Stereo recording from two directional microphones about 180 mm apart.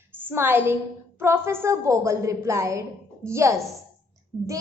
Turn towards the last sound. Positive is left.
turn(degrees=-10)  # may be behind; listen again after turning